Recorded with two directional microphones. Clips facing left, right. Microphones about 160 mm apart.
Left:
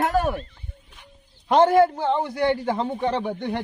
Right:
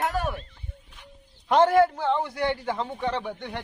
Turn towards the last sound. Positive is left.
turn(degrees=35)  # may be behind; listen again after turning